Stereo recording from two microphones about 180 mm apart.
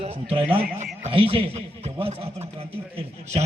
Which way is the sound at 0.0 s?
35° right (ahead or behind).